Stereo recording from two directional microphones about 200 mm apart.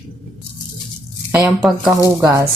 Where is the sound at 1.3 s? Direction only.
5° right (ahead or behind).